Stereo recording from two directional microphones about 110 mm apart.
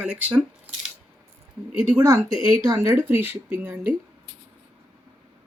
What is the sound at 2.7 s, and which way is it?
Speech, 20° right (ahead or behind).